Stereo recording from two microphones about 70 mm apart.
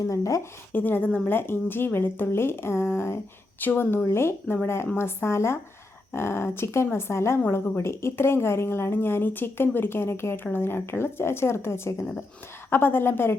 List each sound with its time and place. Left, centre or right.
0.1 s speech: left
0.7 s speech: left